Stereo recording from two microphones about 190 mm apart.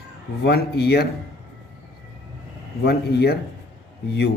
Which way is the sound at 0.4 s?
60° left (ahead or behind).